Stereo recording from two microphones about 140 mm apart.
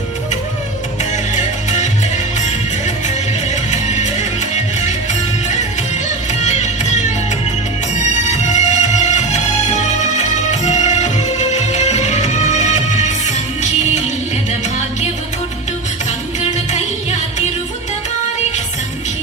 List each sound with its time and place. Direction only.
1.1 s music: 55° left (ahead or behind)
3.5 s music: 55° left (ahead or behind)
6.4 s music: 55° left (ahead or behind)
16.4 s music: 55° left (ahead or behind)